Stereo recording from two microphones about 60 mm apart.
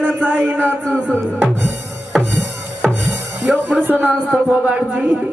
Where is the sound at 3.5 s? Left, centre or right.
Right.